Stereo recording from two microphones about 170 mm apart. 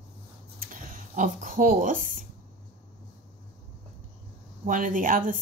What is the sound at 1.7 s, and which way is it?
Speech, 50° right (ahead or behind).